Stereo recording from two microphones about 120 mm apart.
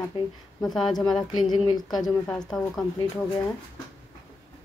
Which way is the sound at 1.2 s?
35° left (ahead or behind).